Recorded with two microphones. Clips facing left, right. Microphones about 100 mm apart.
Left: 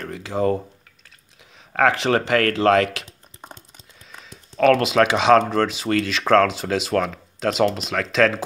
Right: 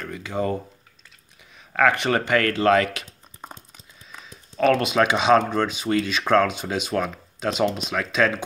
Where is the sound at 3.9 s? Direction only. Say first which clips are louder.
Even; 70° left (ahead or behind); by 8.4 s 90° left.